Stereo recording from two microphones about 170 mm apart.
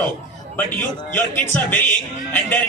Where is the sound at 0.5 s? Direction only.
10° left (ahead or behind).